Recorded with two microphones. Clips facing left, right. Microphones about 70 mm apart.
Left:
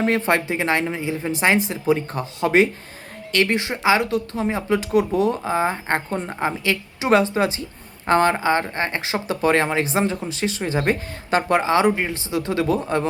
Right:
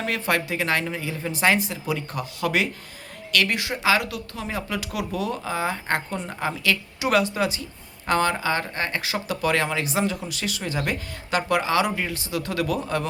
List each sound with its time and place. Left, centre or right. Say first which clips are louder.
0.0 s speech: left 5 dB; left